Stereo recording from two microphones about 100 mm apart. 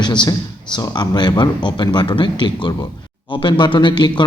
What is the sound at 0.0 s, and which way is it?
Speech, 50° left (ahead or behind).